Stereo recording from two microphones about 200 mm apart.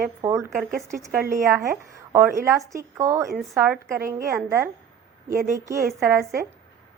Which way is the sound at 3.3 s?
Centre (ahead or behind).